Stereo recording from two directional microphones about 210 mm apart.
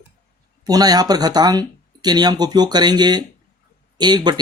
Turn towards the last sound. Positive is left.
turn(degrees=-20)  # may be behind; listen again after turning